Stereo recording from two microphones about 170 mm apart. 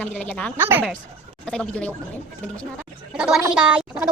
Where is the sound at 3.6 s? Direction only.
5° right (ahead or behind).